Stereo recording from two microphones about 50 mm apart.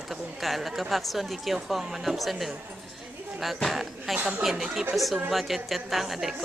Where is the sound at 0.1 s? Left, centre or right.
Centre.